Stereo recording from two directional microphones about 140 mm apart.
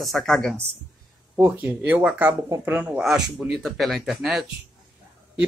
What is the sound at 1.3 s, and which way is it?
Speech, 15° right (ahead or behind).